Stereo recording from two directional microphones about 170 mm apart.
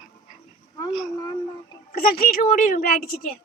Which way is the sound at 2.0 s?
60° left (ahead or behind).